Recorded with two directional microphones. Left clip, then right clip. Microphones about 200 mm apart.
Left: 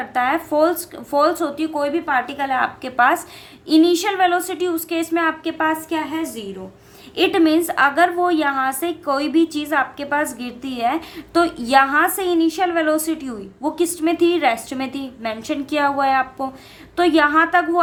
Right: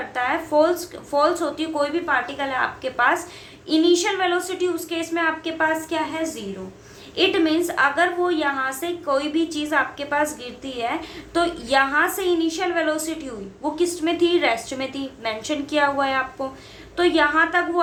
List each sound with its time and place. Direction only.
0.1 s a woman's voice: 45° left (ahead or behind)